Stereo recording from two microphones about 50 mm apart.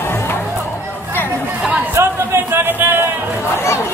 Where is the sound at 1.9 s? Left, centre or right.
Right.